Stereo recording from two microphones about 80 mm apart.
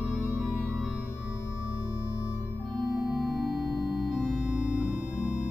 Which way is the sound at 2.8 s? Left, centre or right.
Centre.